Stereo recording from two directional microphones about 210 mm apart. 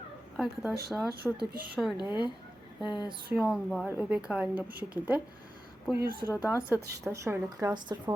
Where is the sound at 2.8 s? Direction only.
20° left (ahead or behind).